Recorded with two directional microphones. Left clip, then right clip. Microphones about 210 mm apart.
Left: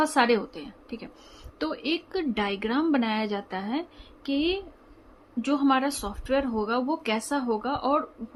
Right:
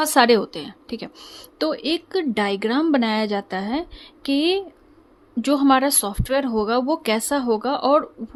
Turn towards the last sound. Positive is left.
turn(degrees=-35)  # may be behind; listen again after turning